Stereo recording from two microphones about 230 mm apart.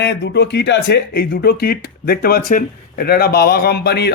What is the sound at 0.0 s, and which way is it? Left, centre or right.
Speech, left.